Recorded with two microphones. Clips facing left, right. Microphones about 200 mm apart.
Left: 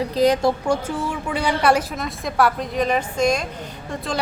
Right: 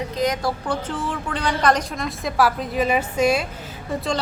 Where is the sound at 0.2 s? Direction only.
30° left (ahead or behind).